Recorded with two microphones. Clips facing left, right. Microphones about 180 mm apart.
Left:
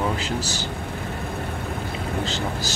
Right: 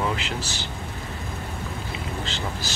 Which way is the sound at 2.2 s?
40° left (ahead or behind).